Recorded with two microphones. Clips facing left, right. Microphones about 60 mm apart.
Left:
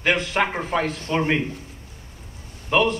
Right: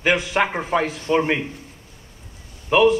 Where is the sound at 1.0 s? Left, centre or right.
Centre.